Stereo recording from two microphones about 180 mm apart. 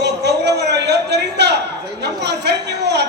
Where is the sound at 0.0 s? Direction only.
70° right (ahead or behind).